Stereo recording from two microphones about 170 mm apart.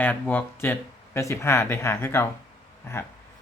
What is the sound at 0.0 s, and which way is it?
Speech, 10° left (ahead or behind).